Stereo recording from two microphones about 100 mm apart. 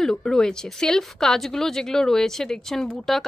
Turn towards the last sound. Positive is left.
turn(degrees=5)  # may be behind; listen again after turning